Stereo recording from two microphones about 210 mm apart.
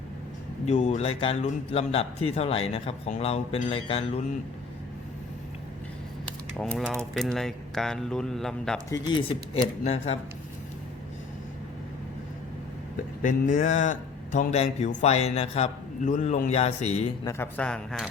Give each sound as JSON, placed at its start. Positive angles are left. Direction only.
{"t": 0.6, "sound": "a man's voice", "side_deg": 30}
{"t": 6.6, "sound": "speech", "side_deg": 0}
{"t": 8.9, "sound": "a man's voice", "side_deg": 20}
{"t": 13.2, "sound": "a man's voice", "side_deg": 40}
{"t": 17.2, "sound": "speech", "side_deg": 10}